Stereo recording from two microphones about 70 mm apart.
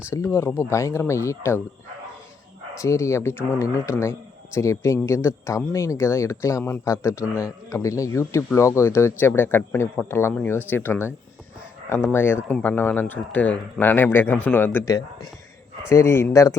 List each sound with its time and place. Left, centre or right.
0.1 s speech: left
2.8 s speech: left
13.9 s speech: left
14.8 s speech: left
15.9 s speech: left